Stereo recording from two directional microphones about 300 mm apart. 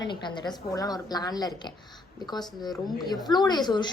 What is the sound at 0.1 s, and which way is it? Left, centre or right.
A woman's voice, centre.